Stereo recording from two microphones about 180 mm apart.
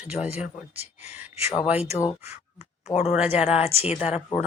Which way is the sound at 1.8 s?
35° left (ahead or behind).